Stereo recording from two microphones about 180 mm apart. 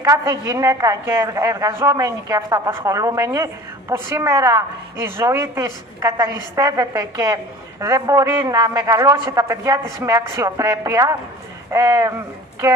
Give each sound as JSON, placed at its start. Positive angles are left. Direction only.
{"t": 0.0, "sound": "a woman's voice", "side_deg": -15}